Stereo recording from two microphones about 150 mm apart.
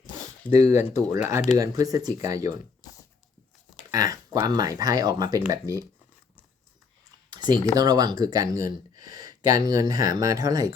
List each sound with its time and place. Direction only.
0.5 s speech: 15° right (ahead or behind)
0.9 s speech: 50° left (ahead or behind)
1.5 s speech: 25° right (ahead or behind)
3.9 s speech: 20° right (ahead or behind)
7.3 s speech: 30° right (ahead or behind)